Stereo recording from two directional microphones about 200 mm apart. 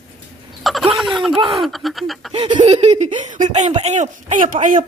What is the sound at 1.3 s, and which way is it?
Laughter, 25° right (ahead or behind).